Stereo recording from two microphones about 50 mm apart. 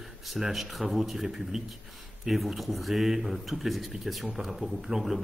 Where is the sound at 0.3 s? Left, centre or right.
Centre.